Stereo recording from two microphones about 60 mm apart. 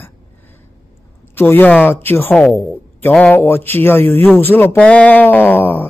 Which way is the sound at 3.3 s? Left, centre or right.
Left.